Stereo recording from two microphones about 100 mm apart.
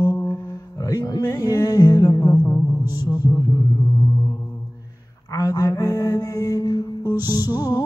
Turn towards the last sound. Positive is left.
turn(degrees=40)  # may be behind; listen again after turning